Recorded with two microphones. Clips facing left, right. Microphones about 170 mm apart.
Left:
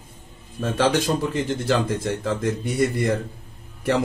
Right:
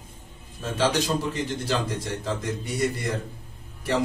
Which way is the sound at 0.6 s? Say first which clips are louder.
Left 4 dB; 55° left (ahead or behind).